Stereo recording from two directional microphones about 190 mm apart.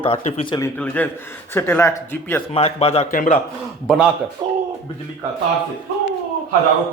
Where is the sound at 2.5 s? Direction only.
30° left (ahead or behind).